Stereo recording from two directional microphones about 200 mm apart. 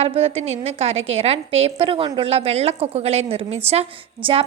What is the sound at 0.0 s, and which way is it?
A woman's voice, 30° right (ahead or behind).